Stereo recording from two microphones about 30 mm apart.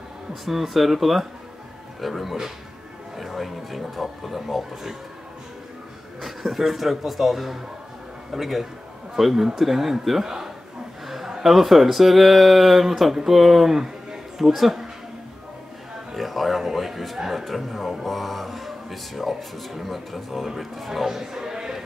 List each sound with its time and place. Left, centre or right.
0.3 s speech: centre
6.2 s speech: centre
10.2 s a man's voice: centre
11.1 s a sound: centre
11.4 s speech: centre
16.1 s a sound: centre
17.2 s speech: centre